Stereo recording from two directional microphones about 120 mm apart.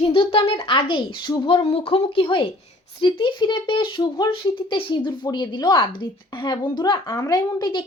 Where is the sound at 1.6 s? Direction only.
55° left (ahead or behind).